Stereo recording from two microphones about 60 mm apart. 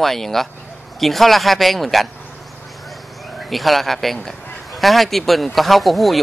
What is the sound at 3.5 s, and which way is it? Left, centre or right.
A man's voice, centre.